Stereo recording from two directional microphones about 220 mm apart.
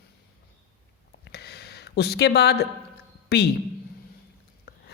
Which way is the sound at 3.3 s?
50° left (ahead or behind).